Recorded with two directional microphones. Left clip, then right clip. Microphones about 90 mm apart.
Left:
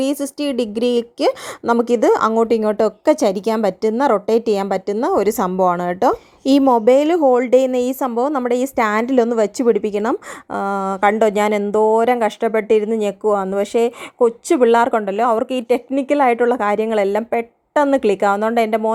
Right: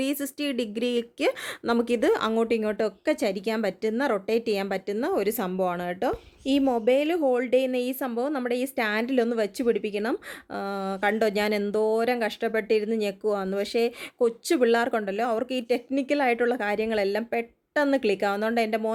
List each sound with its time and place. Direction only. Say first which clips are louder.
0.0 s a woman's voice: left 9 dB; 35° left (ahead or behind)
2.5 s a woman's voice: left 10 dB; 45° left (ahead or behind)
11.1 s a woman's voice: left 9 dB; 30° left (ahead or behind)
14.2 s speech: left 9 dB; 20° left (ahead or behind)
14.7 s a woman's voice: left 9 dB; 30° left (ahead or behind)